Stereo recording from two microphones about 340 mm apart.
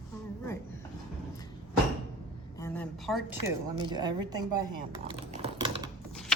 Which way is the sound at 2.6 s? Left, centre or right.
Centre.